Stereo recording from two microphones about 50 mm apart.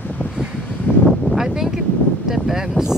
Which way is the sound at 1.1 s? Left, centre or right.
Centre.